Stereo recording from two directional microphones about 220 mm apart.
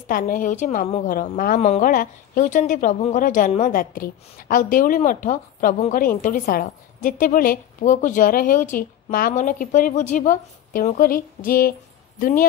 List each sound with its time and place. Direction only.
0.1 s a woman's voice: 40° left (ahead or behind)